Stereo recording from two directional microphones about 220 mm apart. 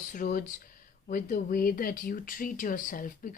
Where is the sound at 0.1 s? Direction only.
40° left (ahead or behind).